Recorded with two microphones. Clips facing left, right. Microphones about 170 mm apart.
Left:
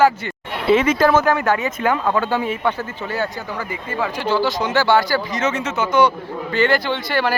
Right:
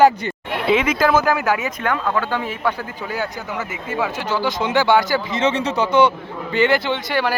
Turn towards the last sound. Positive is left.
turn(degrees=-10)  # may be behind; listen again after turning